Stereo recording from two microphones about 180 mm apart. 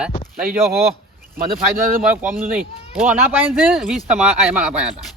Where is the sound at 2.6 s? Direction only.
10° right (ahead or behind).